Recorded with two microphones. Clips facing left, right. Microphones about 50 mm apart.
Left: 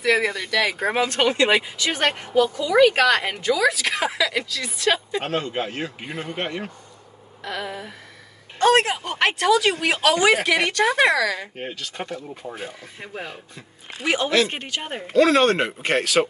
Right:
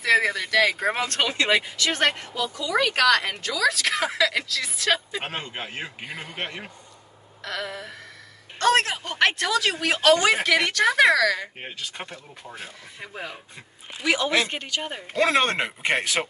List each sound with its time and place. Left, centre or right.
0.0 s a sound: centre
0.3 s speech: centre
0.9 s a woman's voice: centre
5.2 s speech: centre
7.4 s a woman's voice: centre
12.0 s speech: centre
12.4 s a woman's voice: centre
14.0 s speech: left
15.1 s speech: right